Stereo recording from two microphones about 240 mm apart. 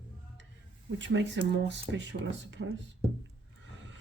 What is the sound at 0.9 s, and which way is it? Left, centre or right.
Speech, right.